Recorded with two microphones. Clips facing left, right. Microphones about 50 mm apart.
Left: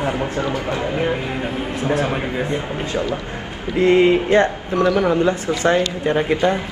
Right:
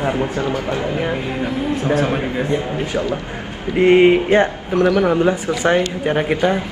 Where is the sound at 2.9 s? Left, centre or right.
Right.